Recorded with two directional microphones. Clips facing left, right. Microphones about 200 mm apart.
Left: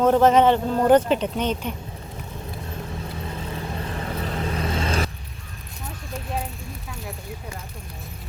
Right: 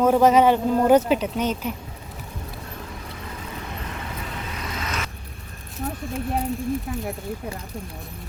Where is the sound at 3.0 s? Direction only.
30° left (ahead or behind).